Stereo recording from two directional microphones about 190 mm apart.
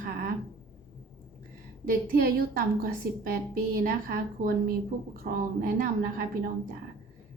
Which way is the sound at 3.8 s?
55° right (ahead or behind).